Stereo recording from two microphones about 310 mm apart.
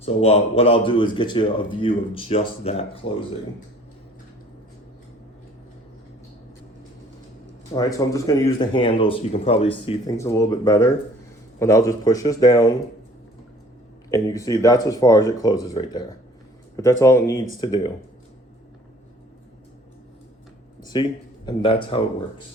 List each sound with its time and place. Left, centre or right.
0.0 s speech: centre
7.7 s speech: centre
14.1 s speech: centre
20.8 s speech: centre